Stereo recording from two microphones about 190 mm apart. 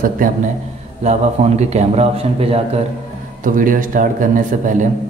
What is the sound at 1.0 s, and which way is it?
Speech, 35° right (ahead or behind).